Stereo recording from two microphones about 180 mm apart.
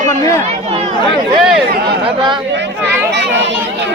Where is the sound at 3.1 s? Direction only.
70° right (ahead or behind).